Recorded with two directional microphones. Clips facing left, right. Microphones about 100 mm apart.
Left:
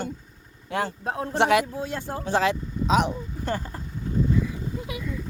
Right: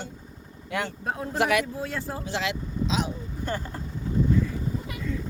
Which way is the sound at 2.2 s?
45° left (ahead or behind).